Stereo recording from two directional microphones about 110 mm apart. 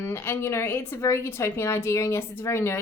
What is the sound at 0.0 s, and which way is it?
A woman's voice, 25° left (ahead or behind).